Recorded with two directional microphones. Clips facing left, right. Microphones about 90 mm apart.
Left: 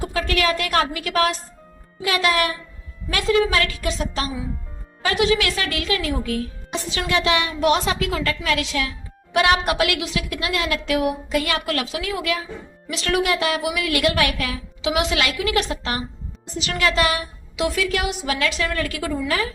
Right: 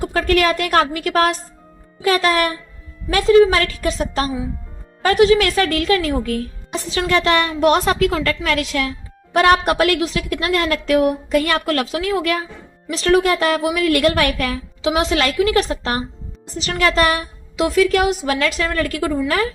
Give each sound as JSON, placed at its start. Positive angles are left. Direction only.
{"t": 0.0, "sound": "a woman's voice", "side_deg": -50}
{"t": 12.9, "sound": "a woman's voice", "side_deg": -35}